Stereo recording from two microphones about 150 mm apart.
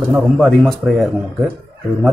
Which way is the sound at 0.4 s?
Centre (ahead or behind).